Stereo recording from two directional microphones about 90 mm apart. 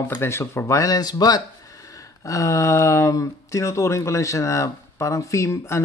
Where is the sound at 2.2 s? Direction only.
35° left (ahead or behind).